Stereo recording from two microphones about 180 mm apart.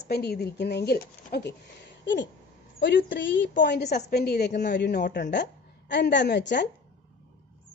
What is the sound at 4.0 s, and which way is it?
A woman's voice, 55° left (ahead or behind).